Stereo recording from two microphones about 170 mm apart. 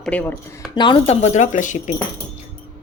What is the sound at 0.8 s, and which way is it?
Speech, 30° left (ahead or behind).